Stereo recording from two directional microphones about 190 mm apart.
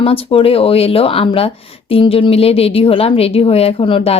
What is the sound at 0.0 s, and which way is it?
A woman's voice, 30° left (ahead or behind).